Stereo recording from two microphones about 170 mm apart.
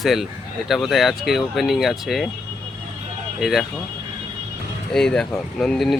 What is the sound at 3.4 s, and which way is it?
Speech, centre (ahead or behind).